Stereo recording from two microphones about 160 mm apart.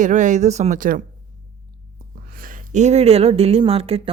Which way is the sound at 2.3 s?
60° right (ahead or behind).